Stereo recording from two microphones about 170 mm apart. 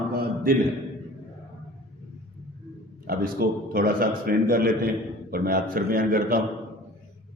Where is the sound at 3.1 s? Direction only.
60° right (ahead or behind).